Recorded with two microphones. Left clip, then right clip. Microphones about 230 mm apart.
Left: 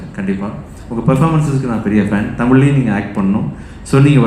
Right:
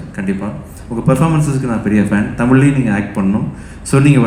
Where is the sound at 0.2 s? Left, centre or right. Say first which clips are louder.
Even; right.